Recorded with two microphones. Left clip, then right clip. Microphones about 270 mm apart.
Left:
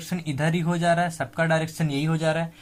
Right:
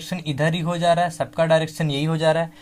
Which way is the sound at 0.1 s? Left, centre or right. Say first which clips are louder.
Right 4 dB; right.